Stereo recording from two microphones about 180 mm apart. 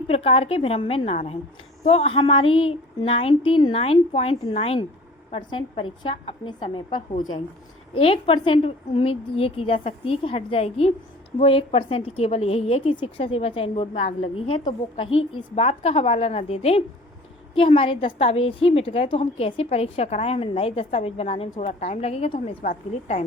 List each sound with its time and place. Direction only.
0.1 s a woman's voice: 35° left (ahead or behind)